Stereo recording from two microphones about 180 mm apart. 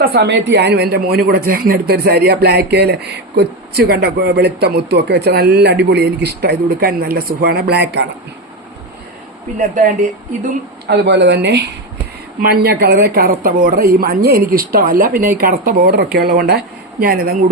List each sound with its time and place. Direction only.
0.0 s a man's voice: 65° right (ahead or behind)
9.6 s speech: 45° right (ahead or behind)
10.8 s speech: 70° right (ahead or behind)
12.4 s a man's voice: 60° right (ahead or behind)